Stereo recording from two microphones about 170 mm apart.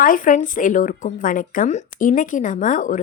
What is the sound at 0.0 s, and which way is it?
Speech, 50° left (ahead or behind).